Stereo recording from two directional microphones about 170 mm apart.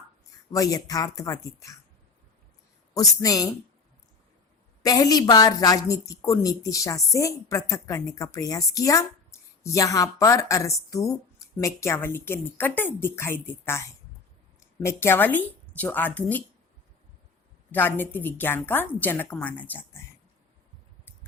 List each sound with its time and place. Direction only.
0.5 s a woman's voice: 20° left (ahead or behind)
2.9 s a woman's voice: 20° left (ahead or behind)
4.8 s a woman's voice: 20° left (ahead or behind)
17.7 s a woman's voice: 10° left (ahead or behind)